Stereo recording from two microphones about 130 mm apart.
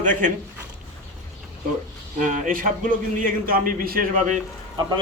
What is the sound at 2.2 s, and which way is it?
A man's voice, 80° right.